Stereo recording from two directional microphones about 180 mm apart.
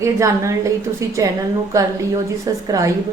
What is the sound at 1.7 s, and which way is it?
Speech, 20° right (ahead or behind).